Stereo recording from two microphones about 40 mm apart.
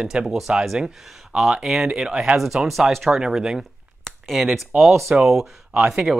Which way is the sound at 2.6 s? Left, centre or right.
Right.